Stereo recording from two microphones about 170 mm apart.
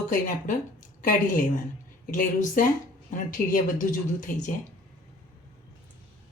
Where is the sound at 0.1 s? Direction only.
55° left (ahead or behind).